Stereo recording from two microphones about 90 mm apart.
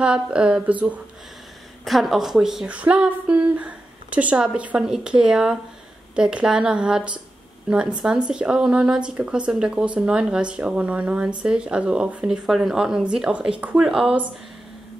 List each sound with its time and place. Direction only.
0.0 s speech: 10° right (ahead or behind)
1.9 s speech: centre (ahead or behind)
8.3 s speech: 10° right (ahead or behind)